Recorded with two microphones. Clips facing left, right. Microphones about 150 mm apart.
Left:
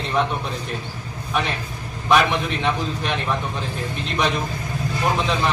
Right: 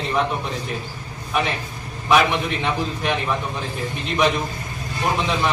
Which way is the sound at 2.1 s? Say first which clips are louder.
Even; 5° right (ahead or behind).